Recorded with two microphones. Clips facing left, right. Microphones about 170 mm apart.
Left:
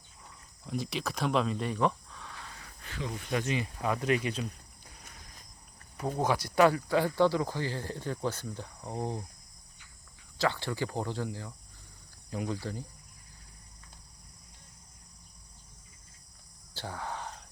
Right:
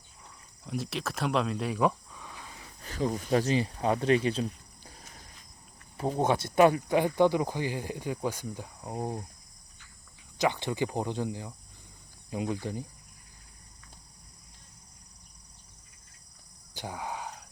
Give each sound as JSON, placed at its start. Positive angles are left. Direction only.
{"t": 0.6, "sound": "speech", "side_deg": 0}
{"t": 2.8, "sound": "speech", "side_deg": -40}
{"t": 6.1, "sound": "speech", "side_deg": -25}
{"t": 10.3, "sound": "speech", "side_deg": -20}
{"t": 16.7, "sound": "cricket", "side_deg": -15}